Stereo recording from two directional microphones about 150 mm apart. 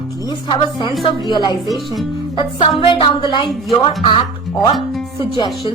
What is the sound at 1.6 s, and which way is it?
Speech, centre (ahead or behind).